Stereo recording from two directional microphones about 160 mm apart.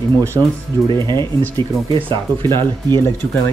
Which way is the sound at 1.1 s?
15° left (ahead or behind).